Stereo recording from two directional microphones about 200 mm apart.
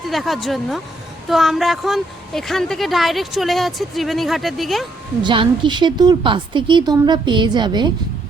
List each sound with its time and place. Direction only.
0.1 s a woman's voice: centre (ahead or behind)
5.2 s a woman's voice: 25° right (ahead or behind)